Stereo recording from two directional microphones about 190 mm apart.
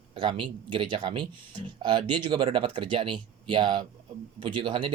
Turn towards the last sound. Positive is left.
turn(degrees=-25)  # may be behind; listen again after turning